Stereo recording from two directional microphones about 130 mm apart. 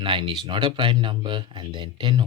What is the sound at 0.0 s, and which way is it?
Speech, 40° right (ahead or behind).